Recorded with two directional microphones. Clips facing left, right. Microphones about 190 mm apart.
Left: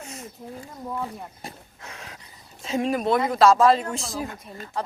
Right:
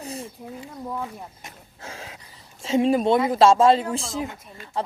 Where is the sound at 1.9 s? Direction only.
30° right (ahead or behind).